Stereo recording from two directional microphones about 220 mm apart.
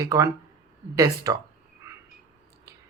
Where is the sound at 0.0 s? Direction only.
15° right (ahead or behind).